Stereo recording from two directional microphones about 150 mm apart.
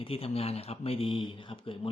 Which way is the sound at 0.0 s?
40° left (ahead or behind).